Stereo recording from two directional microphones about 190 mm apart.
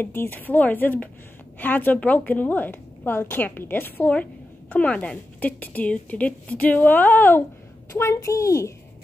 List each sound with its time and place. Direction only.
0.0 s a woman's voice: 10° left (ahead or behind)